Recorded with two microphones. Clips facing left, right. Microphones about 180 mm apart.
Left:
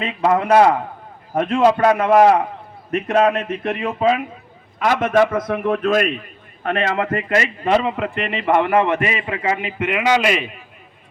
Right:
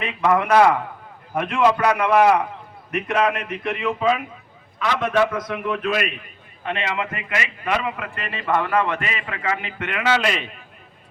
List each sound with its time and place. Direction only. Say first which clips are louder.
0.0 s a man's voice: left 2 dB; 30° left (ahead or behind); by 10.5 s 10° left (ahead or behind)